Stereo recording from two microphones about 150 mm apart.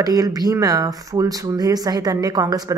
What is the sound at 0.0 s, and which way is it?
Speech, 25° right (ahead or behind).